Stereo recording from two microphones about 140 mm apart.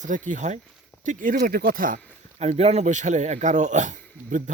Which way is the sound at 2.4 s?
50° right (ahead or behind).